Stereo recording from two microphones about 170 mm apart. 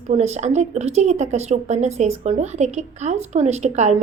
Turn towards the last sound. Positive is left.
turn(degrees=-40)  # may be behind; listen again after turning